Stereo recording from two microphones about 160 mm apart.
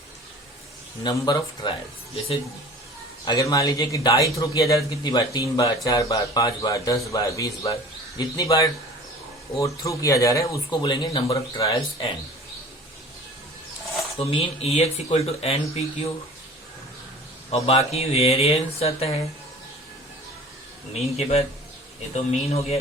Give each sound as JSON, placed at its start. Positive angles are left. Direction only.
{"t": 1.0, "sound": "a man's voice", "side_deg": 25}
{"t": 3.2, "sound": "a man's voice", "side_deg": 25}
{"t": 11.7, "sound": "speech", "side_deg": 35}
{"t": 14.2, "sound": "speech", "side_deg": 35}
{"t": 17.5, "sound": "speech", "side_deg": 40}
{"t": 21.2, "sound": "speech", "side_deg": 40}